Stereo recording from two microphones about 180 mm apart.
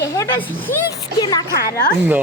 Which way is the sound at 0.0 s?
15° left (ahead or behind).